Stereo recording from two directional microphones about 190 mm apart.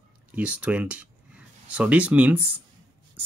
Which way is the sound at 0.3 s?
5° right (ahead or behind).